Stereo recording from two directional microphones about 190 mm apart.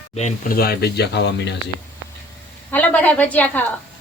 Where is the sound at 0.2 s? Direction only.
45° left (ahead or behind); by 1.5 s 65° left (ahead or behind).